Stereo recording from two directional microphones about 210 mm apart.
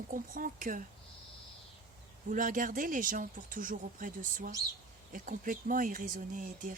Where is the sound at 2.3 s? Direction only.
40° right (ahead or behind).